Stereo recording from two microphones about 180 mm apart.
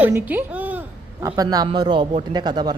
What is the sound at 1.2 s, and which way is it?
A man's voice, 20° right (ahead or behind).